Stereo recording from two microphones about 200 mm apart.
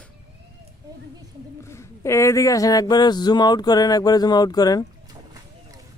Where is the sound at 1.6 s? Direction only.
15° left (ahead or behind).